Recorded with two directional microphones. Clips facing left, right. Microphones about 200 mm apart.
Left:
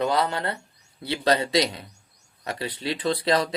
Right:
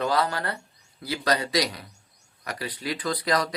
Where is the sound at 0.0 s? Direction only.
25° left (ahead or behind).